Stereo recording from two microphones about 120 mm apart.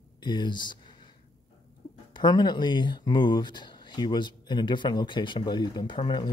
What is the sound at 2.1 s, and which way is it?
Speech, 35° left (ahead or behind).